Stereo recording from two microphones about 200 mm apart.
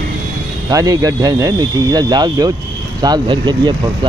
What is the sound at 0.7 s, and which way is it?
Speech, 15° right (ahead or behind).